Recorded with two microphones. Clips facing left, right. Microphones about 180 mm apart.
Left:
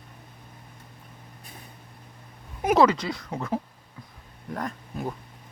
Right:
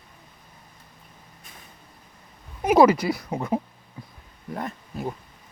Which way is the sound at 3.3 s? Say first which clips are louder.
Right 3 dB; 20° right (ahead or behind).